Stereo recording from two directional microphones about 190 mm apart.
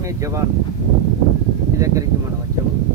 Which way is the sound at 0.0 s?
15° right (ahead or behind).